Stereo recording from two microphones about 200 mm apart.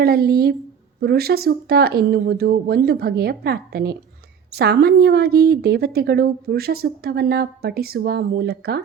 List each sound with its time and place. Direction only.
0.0 s speech: 50° right (ahead or behind)